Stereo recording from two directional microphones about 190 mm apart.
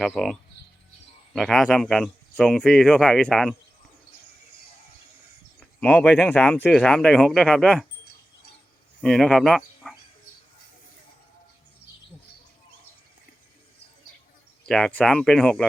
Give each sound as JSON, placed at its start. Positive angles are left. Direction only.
{"t": 0.0, "sound": "speech", "side_deg": 0}
{"t": 5.5, "sound": "speech", "side_deg": 10}
{"t": 9.0, "sound": "speech", "side_deg": 0}
{"t": 14.7, "sound": "speech", "side_deg": 5}